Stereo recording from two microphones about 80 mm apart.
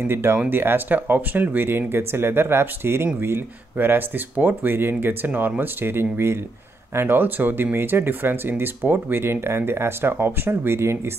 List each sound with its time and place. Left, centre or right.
0.0 s speech: right